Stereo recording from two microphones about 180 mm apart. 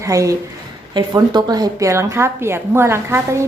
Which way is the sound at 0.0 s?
20° right (ahead or behind).